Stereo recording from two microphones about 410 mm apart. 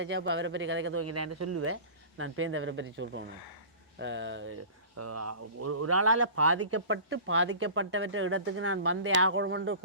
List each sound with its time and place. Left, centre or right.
0.0 s speech: right